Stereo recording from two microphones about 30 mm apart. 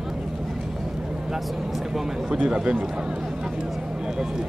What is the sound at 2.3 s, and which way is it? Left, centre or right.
Speech, right.